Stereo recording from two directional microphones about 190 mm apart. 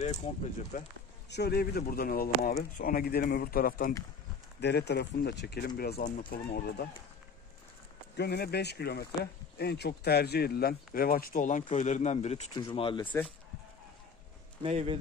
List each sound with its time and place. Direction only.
0.0 s speech: 35° left (ahead or behind)
0.7 s speech: 45° left (ahead or behind)
1.3 s speech: 60° left (ahead or behind)
4.6 s speech: 60° left (ahead or behind)
8.2 s speech: 60° left (ahead or behind); by 13.0 s 25° left (ahead or behind)
13.0 s speech: 10° left (ahead or behind)
14.6 s speech: 30° right (ahead or behind)